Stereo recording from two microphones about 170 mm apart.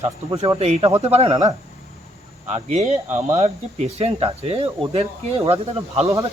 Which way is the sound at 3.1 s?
10° right (ahead or behind).